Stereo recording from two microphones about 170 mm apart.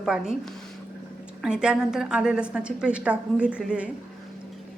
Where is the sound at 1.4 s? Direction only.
5° right (ahead or behind).